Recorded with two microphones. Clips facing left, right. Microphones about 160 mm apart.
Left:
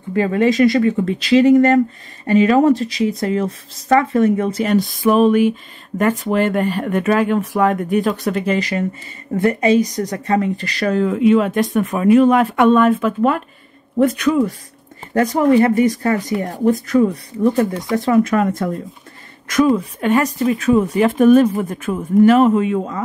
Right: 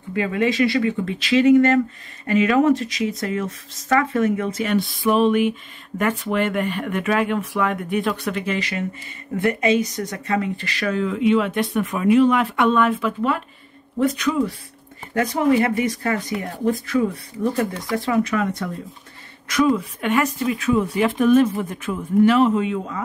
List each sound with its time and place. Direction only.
0.1 s speech: 40° left (ahead or behind)
15.6 s speech: 40° left (ahead or behind)